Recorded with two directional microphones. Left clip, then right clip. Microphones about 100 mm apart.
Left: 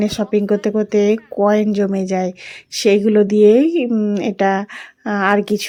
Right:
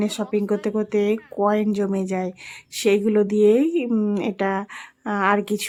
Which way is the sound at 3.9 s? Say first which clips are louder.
Left 4 dB; 10° left (ahead or behind).